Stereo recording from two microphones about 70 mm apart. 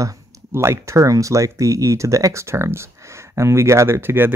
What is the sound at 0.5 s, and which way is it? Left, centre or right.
Speech, right.